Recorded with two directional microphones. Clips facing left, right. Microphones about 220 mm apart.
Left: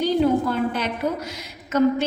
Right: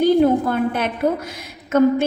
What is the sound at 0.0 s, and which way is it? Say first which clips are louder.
A woman's voice: right 5 dB; 50° right (ahead or behind).